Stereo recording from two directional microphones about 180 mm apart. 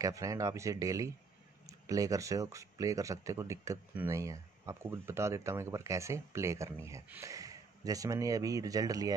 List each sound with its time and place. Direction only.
0.0 s speech: 20° right (ahead or behind)